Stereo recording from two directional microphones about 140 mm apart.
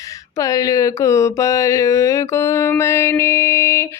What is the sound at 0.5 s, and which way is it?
Mantra, 25° left (ahead or behind).